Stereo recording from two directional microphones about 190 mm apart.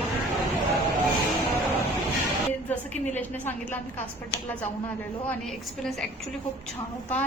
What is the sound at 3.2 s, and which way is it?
Speech, 10° left (ahead or behind).